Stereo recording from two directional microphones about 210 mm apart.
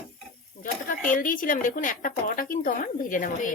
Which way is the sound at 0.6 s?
40° left (ahead or behind).